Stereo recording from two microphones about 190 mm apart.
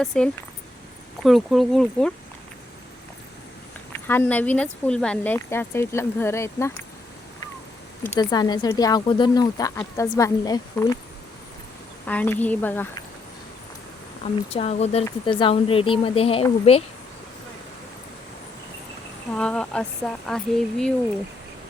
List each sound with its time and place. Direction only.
0.0 s speech: centre (ahead or behind)
3.9 s speech: 10° left (ahead or behind)
8.2 s speech: 20° left (ahead or behind)
12.0 s speech: 10° left (ahead or behind)
14.5 s speech: 35° left (ahead or behind)
19.3 s speech: 5° left (ahead or behind)